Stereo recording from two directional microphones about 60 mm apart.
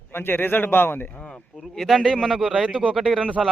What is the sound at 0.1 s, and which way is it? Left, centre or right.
Speech, left.